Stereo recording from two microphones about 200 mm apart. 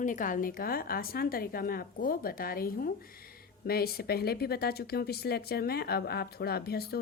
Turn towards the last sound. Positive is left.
turn(degrees=50)  # may be behind; listen again after turning